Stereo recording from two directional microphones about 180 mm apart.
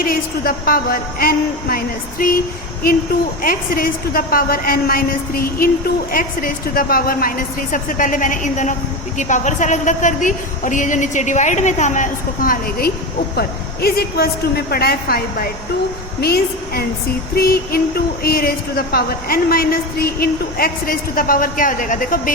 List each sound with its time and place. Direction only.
0.0 s speech: 55° left (ahead or behind)
3.4 s a woman's voice: 55° left (ahead or behind)